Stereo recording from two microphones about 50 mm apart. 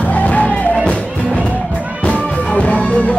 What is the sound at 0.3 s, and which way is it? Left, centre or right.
Music, left.